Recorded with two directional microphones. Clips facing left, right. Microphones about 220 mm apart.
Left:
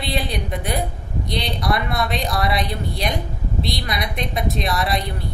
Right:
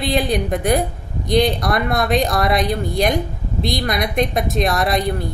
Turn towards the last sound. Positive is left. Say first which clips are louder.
# right 4 dB
turn(degrees=-45)  # may be behind; listen again after turning